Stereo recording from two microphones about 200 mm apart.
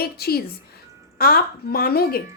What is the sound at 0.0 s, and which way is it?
A woman's voice, 50° left (ahead or behind).